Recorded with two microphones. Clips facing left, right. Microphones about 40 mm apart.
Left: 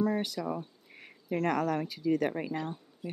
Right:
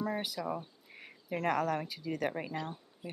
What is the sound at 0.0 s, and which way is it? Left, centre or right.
Speech, centre.